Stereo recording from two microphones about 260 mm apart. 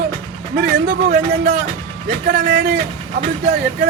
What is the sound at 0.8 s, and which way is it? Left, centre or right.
Speech, right.